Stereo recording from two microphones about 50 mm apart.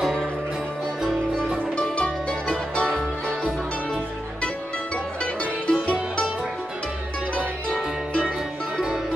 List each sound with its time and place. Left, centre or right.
0.0 s music: centre
2.7 s music: left
5.7 s music: left